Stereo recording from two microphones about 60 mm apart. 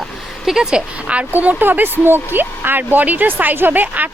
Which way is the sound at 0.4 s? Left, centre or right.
Centre.